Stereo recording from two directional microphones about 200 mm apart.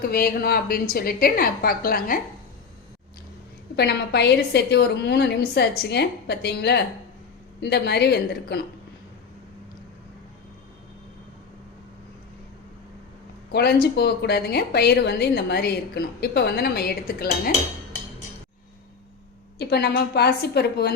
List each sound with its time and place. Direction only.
0.0 s a woman's voice: 50° left (ahead or behind)
3.8 s a woman's voice: 55° left (ahead or behind)
13.5 s a woman's voice: 55° left (ahead or behind)
19.5 s a woman's voice: 55° left (ahead or behind)